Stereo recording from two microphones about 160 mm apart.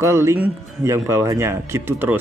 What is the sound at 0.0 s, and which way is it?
Speech, 15° right (ahead or behind).